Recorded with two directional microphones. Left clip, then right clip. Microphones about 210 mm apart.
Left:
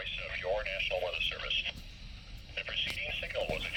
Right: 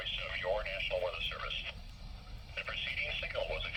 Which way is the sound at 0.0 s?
15° right (ahead or behind).